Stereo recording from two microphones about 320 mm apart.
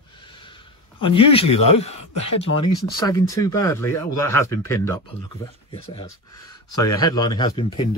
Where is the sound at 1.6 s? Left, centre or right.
Left.